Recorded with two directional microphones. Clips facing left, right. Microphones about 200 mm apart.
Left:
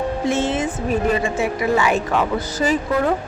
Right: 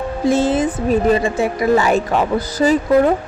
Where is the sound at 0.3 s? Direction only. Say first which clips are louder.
Right 7 dB; 35° right (ahead or behind).